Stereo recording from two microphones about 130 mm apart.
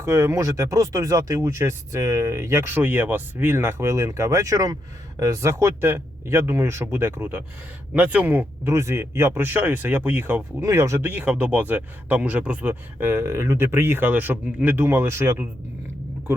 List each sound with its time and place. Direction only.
0.0 s speech: 20° right (ahead or behind)